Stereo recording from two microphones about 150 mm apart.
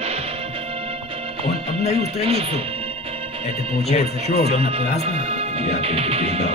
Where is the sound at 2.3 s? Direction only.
40° right (ahead or behind).